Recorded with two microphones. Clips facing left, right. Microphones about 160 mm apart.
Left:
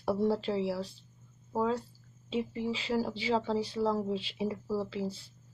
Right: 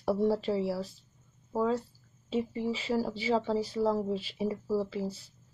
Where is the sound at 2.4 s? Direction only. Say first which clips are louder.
Right 2 dB; 35° right (ahead or behind).